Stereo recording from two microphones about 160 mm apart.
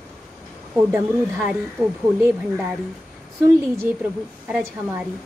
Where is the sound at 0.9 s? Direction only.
5° right (ahead or behind).